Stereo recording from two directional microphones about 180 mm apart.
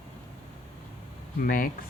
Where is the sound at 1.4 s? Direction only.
50° left (ahead or behind).